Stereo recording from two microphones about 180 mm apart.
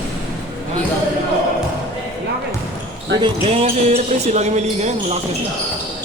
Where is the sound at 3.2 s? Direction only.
35° right (ahead or behind).